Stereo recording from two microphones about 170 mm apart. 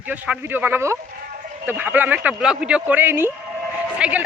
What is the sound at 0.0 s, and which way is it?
A man's voice, 10° right (ahead or behind).